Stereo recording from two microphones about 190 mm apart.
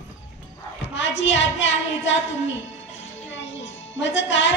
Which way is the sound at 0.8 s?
80° left.